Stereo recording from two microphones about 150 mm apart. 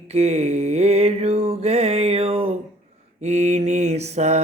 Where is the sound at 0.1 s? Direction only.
45° right (ahead or behind).